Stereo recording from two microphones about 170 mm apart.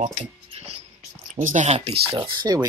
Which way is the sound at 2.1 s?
25° right (ahead or behind).